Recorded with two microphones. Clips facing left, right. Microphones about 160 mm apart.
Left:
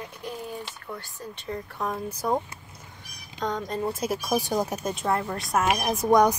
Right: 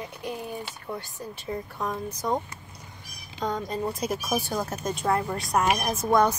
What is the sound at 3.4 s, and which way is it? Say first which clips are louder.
Speech: even; 5° right (ahead or behind).